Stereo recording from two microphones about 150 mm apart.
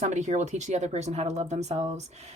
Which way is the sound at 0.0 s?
50° right (ahead or behind).